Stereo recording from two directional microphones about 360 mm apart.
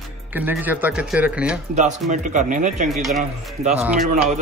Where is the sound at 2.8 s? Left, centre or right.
Centre.